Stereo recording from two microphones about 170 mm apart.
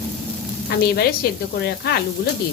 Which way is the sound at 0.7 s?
70° left (ahead or behind).